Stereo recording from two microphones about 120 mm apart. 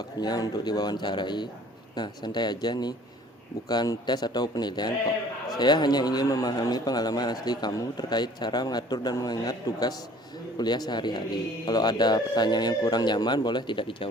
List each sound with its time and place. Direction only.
0.0 s a man's voice: 35° left (ahead or behind)